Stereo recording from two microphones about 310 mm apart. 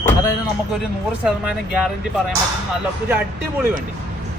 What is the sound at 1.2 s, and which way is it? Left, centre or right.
Speech, centre.